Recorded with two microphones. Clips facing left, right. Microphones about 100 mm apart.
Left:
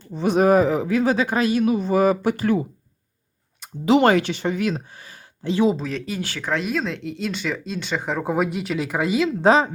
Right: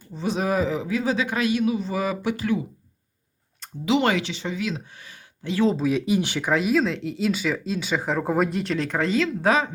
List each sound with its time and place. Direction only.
0.1 s speech: 60° left (ahead or behind)
3.8 s speech: 45° left (ahead or behind)
5.7 s speech: 10° right (ahead or behind)
6.5 s speech: 5° right (ahead or behind)
9.4 s a woman's voice: 30° left (ahead or behind)